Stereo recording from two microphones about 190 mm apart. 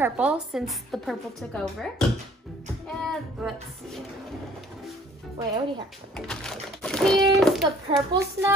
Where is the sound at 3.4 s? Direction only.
Centre (ahead or behind).